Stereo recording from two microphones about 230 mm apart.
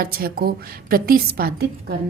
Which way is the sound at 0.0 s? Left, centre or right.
Right.